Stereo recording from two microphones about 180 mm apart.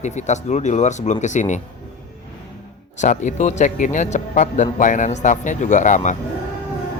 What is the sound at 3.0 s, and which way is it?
Speech, 40° left (ahead or behind).